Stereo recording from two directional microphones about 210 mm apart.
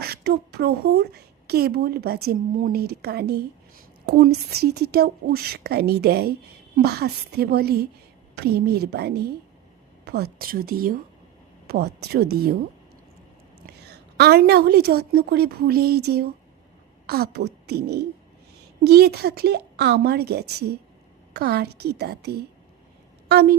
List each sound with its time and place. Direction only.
0.0 s a woman's voice: 50° right (ahead or behind)
10.0 s a sound: 50° right (ahead or behind)
10.3 s a woman's voice: 45° right (ahead or behind)
11.9 s a woman's voice: 50° right (ahead or behind)
13.6 s a woman's voice: 50° right (ahead or behind)